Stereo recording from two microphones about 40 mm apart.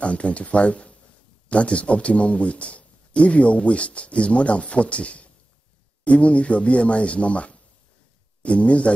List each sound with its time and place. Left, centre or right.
0.0 s a man's voice: left